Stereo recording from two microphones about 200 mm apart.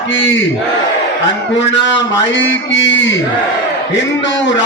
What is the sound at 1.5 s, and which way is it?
A man's voice, 65° left (ahead or behind).